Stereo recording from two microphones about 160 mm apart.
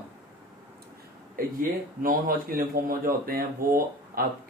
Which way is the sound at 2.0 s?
60° right (ahead or behind).